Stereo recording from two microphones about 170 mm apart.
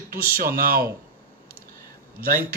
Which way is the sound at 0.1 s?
60° right (ahead or behind).